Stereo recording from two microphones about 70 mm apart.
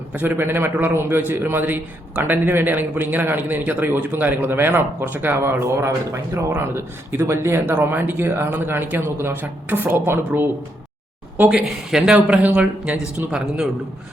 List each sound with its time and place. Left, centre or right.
0.1 s a man's voice: right
11.6 s speech: centre
12.1 s a man's voice: right